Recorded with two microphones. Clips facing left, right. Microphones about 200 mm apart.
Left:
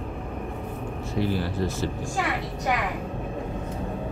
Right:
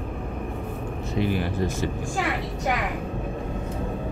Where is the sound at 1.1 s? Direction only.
15° right (ahead or behind).